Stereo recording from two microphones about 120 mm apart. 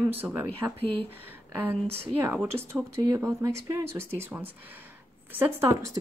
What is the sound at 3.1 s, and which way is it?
Speech, 25° right (ahead or behind).